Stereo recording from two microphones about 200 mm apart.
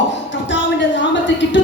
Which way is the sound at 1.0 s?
65° left (ahead or behind).